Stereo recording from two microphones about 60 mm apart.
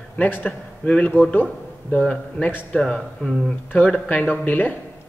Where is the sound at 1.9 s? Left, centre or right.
Centre.